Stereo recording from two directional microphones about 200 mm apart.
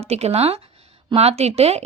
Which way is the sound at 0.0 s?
30° right (ahead or behind).